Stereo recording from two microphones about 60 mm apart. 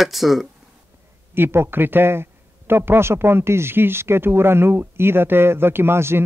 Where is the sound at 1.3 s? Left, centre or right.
Right.